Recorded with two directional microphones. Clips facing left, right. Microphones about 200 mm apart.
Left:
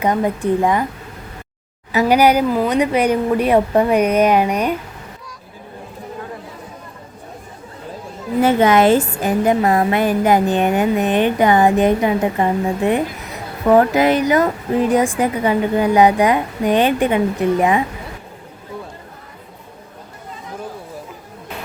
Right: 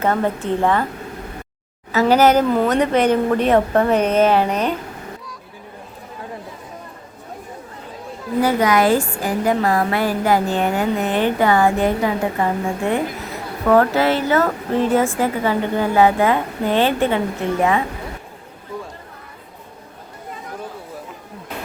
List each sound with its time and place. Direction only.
0.0 s speech: 15° left (ahead or behind)
1.9 s speech: 15° left (ahead or behind)
8.4 s a woman's voice: 25° left (ahead or behind)